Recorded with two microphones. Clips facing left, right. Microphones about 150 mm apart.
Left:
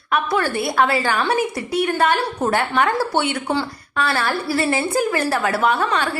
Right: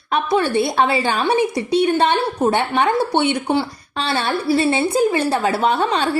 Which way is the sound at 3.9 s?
25° right (ahead or behind).